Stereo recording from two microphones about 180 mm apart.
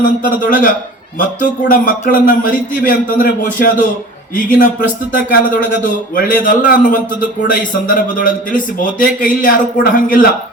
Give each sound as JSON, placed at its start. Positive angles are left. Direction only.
{"t": 0.0, "sound": "a man's voice", "side_deg": 50}